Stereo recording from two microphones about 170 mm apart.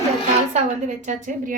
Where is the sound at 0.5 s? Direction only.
45° right (ahead or behind).